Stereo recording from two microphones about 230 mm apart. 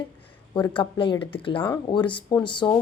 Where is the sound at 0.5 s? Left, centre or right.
Left.